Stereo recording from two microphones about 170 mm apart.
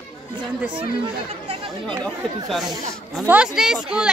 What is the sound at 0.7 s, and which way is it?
Speech, 30° right (ahead or behind).